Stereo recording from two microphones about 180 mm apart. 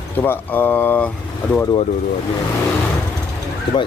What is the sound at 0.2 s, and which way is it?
Speech, 10° left (ahead or behind).